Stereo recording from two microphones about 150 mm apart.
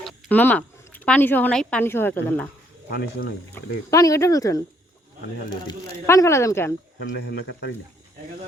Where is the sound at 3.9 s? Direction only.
20° left (ahead or behind).